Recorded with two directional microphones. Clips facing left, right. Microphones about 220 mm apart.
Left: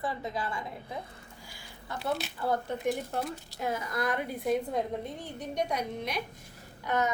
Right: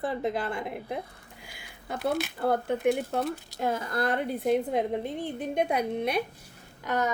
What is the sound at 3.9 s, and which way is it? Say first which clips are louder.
Speech: right 3 dB; 30° right (ahead or behind).